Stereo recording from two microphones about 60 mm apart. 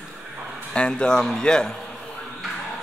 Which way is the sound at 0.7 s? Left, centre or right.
Centre.